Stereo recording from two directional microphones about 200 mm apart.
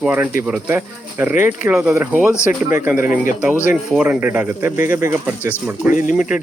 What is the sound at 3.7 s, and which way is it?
Speech, 5° right (ahead or behind).